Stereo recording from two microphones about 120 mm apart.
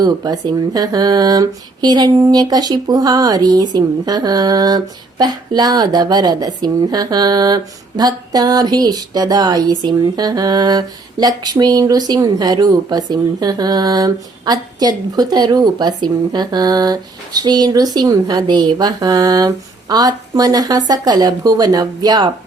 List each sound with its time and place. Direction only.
0.0 s speech: 35° right (ahead or behind)